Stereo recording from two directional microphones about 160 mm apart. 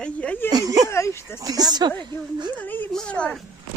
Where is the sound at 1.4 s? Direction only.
25° right (ahead or behind).